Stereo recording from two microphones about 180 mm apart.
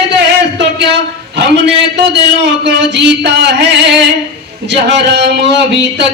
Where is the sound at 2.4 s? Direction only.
75° right (ahead or behind).